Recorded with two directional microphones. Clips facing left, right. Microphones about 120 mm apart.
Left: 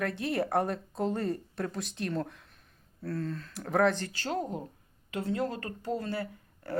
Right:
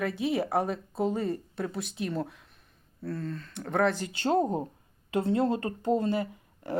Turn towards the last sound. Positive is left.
turn(degrees=-20)  # may be behind; listen again after turning